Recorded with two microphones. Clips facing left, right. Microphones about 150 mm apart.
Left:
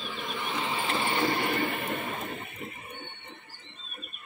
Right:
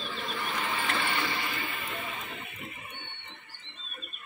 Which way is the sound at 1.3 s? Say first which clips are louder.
Left 7 dB; 55° left (ahead or behind).